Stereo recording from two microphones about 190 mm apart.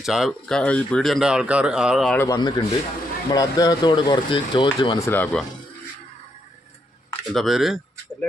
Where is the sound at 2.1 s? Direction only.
15° left (ahead or behind).